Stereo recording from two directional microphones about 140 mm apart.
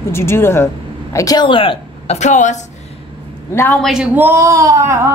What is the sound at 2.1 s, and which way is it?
Speech, 60° left (ahead or behind).